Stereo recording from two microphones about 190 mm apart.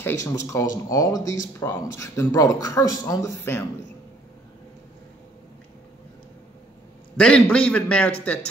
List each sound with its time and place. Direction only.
0.0 s speech: 15° left (ahead or behind)
7.2 s a man's voice: 5° left (ahead or behind)